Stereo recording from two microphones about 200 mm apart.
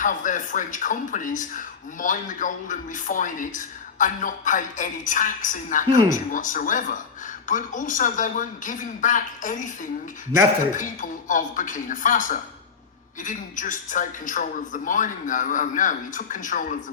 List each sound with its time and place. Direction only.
0.0 s speech: 40° left (ahead or behind)
10.8 s speech: 40° left (ahead or behind)